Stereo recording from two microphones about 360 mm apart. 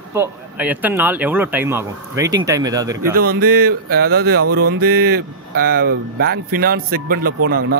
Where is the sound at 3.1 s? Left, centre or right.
Right.